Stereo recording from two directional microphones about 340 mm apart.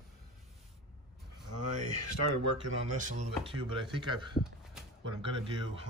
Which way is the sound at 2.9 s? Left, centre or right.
Right.